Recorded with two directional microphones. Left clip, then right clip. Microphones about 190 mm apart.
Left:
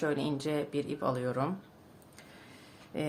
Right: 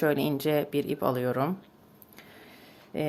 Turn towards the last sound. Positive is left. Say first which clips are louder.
# right 5 dB
turn(degrees=-25)  # may be behind; listen again after turning